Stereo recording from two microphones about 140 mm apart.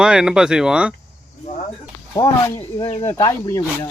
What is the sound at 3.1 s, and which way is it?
Speech, 20° left (ahead or behind).